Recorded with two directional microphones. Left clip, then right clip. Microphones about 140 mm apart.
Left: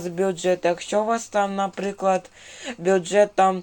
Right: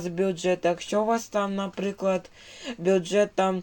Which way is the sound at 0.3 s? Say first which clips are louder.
Left 4 dB; 15° right (ahead or behind).